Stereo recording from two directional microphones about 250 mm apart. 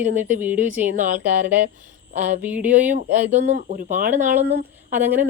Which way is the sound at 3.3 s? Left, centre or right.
Right.